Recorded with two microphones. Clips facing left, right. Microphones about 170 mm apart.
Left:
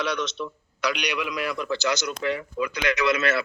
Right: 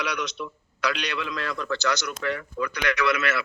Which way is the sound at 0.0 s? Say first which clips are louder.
Left 3 dB; 25° left (ahead or behind).